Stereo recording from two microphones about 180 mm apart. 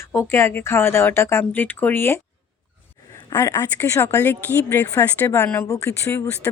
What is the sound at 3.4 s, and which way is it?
Speech, 15° left (ahead or behind).